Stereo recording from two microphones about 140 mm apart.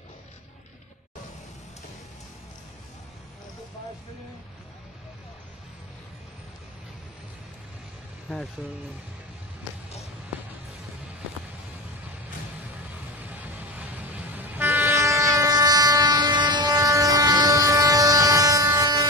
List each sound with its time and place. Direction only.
13.3 s train: 10° right (ahead or behind)